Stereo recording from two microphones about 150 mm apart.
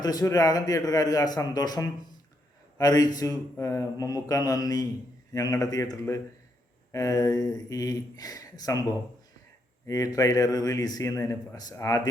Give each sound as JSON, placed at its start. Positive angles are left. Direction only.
{"t": 0.0, "sound": "a man's voice", "side_deg": 25}